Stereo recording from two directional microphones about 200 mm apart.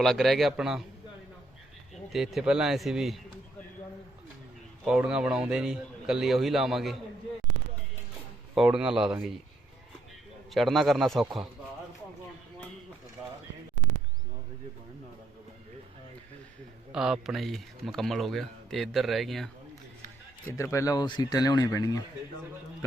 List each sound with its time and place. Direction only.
0.0 s a man's voice: centre (ahead or behind)
2.1 s a man's voice: centre (ahead or behind)
4.9 s a man's voice: 5° right (ahead or behind)
8.5 s a man's voice: 5° right (ahead or behind)
10.5 s a man's voice: centre (ahead or behind)
16.9 s a man's voice: 5° right (ahead or behind)
20.6 s speech: 15° left (ahead or behind)